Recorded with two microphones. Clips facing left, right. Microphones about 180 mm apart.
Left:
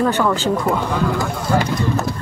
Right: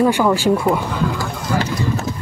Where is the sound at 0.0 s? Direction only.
10° right (ahead or behind).